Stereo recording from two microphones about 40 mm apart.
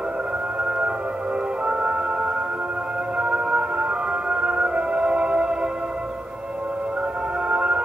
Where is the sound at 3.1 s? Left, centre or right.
Right.